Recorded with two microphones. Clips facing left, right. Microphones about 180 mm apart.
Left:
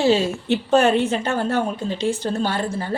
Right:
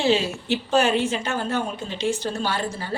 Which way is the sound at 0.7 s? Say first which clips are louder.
Left 4 dB; 60° left (ahead or behind).